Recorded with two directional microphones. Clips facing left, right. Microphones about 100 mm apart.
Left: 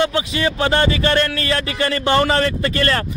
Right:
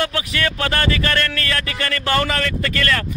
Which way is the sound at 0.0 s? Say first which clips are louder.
Left 3 dB; 20° left (ahead or behind).